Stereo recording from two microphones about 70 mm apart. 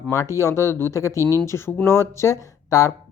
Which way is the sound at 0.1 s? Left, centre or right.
Left.